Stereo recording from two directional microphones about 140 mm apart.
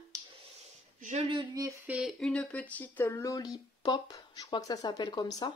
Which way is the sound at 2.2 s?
10° left (ahead or behind).